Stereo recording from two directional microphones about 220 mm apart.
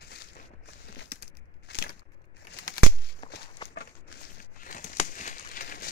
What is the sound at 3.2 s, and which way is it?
Walk, 20° left (ahead or behind).